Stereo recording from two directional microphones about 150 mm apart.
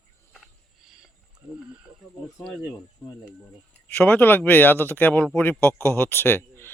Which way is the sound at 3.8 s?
10° left (ahead or behind).